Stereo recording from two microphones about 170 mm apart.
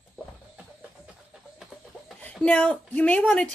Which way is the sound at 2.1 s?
5° left (ahead or behind).